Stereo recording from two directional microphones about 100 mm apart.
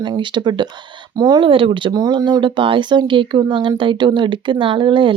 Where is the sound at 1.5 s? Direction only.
60° right (ahead or behind).